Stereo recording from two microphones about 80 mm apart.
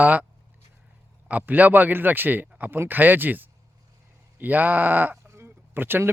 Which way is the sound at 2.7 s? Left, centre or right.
Right.